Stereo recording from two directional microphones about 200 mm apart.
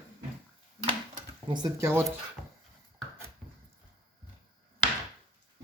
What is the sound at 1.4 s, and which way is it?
Speech, 15° right (ahead or behind).